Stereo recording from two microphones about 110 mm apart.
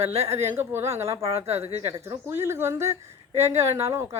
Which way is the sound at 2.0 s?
25° right (ahead or behind).